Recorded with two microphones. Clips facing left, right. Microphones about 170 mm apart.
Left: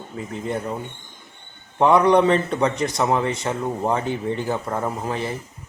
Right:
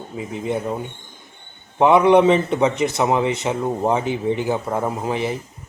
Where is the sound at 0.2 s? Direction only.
15° right (ahead or behind).